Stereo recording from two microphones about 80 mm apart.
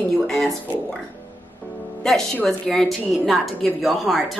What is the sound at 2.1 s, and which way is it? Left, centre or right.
A woman's voice, centre.